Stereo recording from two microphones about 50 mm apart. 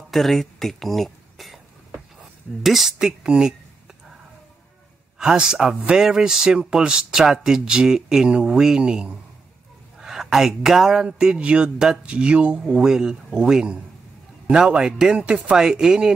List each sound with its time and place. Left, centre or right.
0.1 s a sound: centre
2.6 s speech: centre
5.2 s speech: centre